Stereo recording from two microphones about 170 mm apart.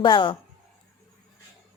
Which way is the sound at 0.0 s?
30° left (ahead or behind).